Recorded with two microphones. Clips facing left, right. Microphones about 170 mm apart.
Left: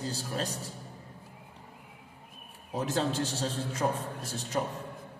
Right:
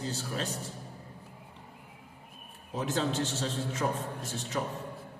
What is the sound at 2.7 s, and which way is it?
A man's voice, 35° left (ahead or behind).